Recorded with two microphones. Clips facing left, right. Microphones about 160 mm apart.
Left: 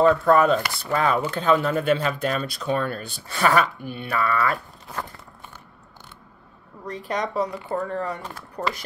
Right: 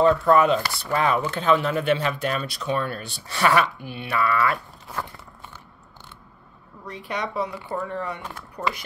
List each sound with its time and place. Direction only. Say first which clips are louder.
0.0 s speech: even; 45° left (ahead or behind)
6.9 s speech: left 3 dB; 40° left (ahead or behind)